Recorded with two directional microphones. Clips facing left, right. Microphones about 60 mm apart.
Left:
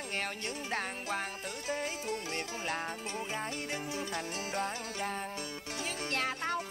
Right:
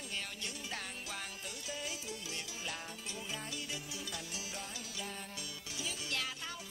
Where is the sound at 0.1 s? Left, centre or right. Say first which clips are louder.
Left 7 dB; left.